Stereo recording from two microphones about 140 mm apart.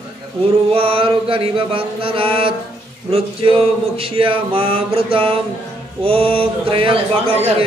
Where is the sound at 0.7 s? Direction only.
40° right (ahead or behind).